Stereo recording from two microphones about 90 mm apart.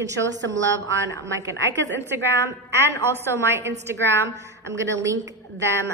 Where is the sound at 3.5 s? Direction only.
30° right (ahead or behind).